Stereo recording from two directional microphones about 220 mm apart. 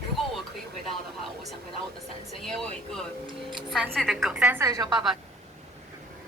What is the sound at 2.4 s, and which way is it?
Speech, centre (ahead or behind).